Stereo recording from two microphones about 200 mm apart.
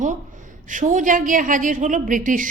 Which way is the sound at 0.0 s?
40° right (ahead or behind).